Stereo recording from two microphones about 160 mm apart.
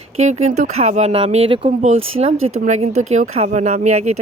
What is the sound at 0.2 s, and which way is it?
Speech, 45° right (ahead or behind).